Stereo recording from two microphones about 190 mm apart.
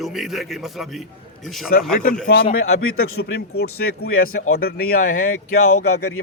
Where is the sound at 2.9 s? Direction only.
50° left (ahead or behind).